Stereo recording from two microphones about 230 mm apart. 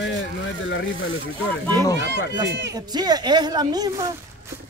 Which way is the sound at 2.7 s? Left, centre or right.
Centre.